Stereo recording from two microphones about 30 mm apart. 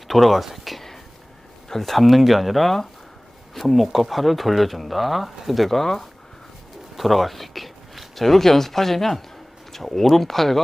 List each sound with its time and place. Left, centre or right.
0.1 s speech: centre
1.7 s speech: centre
5.8 s speech: centre
6.9 s speech: centre